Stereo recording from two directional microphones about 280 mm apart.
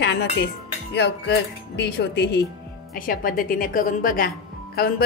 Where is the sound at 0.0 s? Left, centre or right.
Left.